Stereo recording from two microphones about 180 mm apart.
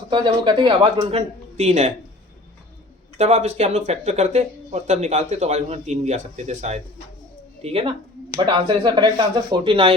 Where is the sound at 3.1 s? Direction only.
40° right (ahead or behind).